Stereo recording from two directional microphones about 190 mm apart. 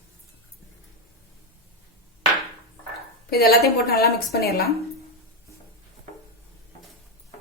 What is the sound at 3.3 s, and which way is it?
A woman's voice, 55° left (ahead or behind).